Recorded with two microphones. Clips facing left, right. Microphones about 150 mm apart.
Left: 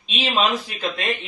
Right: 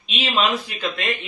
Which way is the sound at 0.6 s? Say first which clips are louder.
Even; 35° left (ahead or behind).